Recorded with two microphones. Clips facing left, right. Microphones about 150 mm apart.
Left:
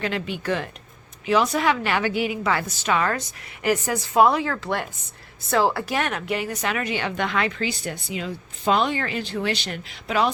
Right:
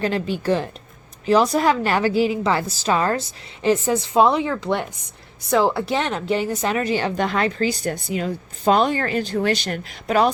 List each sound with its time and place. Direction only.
0.0 s a woman's voice: 35° right (ahead or behind)